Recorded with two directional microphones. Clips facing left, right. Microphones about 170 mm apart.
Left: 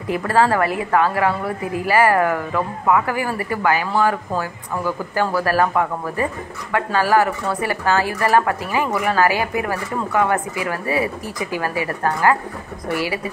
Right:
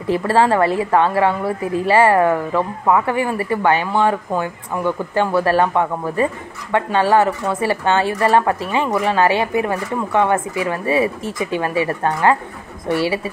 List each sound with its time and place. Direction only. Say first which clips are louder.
0.0 s a woman's voice: right 2 dB; 30° right (ahead or behind)